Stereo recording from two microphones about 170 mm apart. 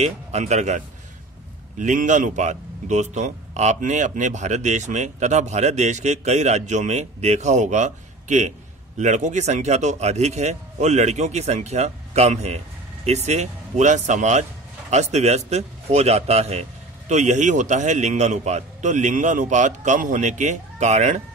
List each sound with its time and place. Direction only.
0.0 s a man's voice: 40° right (ahead or behind)